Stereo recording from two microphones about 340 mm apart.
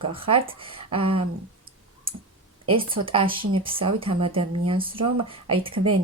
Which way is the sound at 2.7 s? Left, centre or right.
Centre.